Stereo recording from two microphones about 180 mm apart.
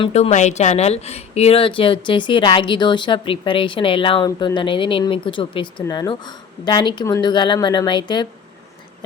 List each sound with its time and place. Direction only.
0.0 s a woman's voice: 35° left (ahead or behind)